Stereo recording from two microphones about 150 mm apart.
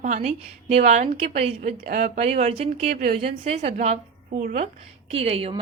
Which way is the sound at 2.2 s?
45° right (ahead or behind).